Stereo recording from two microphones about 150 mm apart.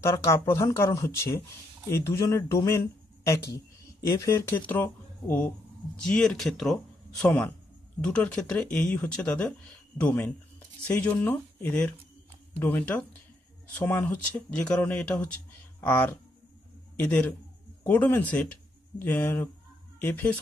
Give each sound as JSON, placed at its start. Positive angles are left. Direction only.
{"t": 0.0, "sound": "speech", "side_deg": 15}